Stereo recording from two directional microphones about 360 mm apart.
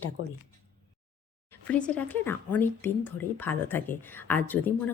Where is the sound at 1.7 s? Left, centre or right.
Centre.